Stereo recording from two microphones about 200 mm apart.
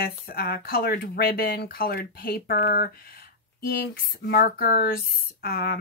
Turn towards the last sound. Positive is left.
turn(degrees=50)  # may be behind; listen again after turning